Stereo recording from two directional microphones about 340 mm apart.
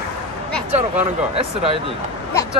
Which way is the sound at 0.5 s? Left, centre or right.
Centre.